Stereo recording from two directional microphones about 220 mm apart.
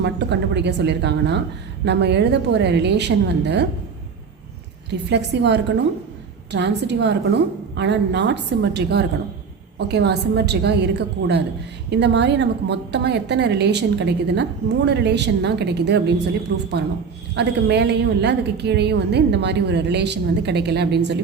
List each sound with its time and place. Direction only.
0.0 s a woman's voice: 50° right (ahead or behind)
4.9 s a woman's voice: 50° right (ahead or behind)